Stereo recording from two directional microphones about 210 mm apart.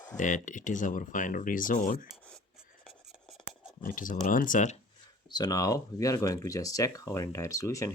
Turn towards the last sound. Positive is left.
turn(degrees=15)  # may be behind; listen again after turning